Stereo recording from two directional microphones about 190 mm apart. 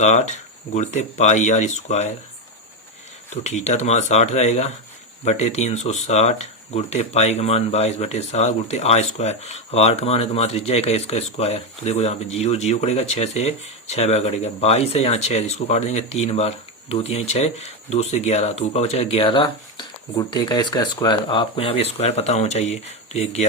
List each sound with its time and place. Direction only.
0.0 s speech: 40° left (ahead or behind)
3.4 s speech: 35° left (ahead or behind)